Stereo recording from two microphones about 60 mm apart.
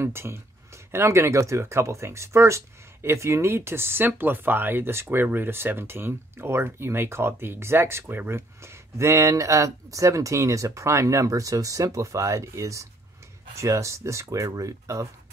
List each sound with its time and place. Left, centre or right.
0.0 s speech: right